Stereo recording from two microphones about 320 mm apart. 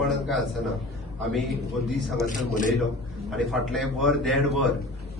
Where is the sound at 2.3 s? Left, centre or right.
Left.